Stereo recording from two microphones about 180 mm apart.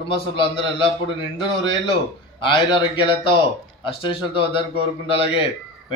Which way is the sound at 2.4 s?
25° left (ahead or behind).